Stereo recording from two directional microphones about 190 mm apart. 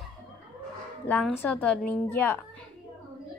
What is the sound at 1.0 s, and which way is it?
A woman's voice, 10° left (ahead or behind).